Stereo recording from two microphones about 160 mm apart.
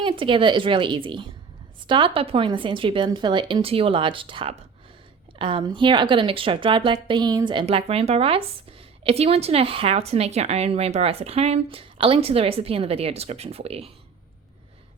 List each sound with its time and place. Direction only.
0.0 s a woman's voice: 30° right (ahead or behind)